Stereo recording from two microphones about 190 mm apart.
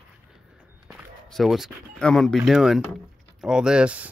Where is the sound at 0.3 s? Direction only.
5° right (ahead or behind).